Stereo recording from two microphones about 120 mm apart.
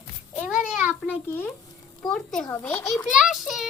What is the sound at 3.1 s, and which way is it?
Speech, 5° right (ahead or behind).